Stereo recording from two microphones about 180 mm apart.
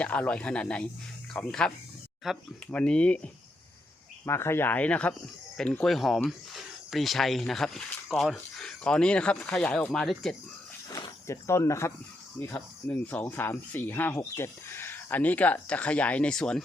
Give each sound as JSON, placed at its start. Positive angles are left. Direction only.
{"t": 0.0, "sound": "speech", "side_deg": 5}
{"t": 4.3, "sound": "speech", "side_deg": 15}
{"t": 10.8, "sound": "speech", "side_deg": 20}